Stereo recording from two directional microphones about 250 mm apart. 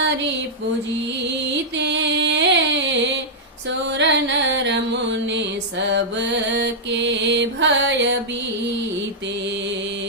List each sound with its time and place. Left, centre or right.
1.8 s music: right
5.9 s mantra: right